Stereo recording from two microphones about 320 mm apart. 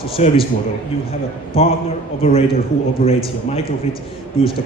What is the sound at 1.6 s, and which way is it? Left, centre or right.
A man's voice, centre.